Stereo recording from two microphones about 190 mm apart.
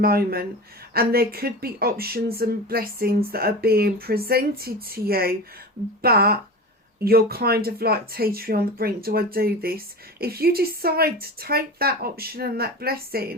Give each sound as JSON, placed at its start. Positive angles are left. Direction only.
{"t": 0.0, "sound": "speech", "side_deg": -50}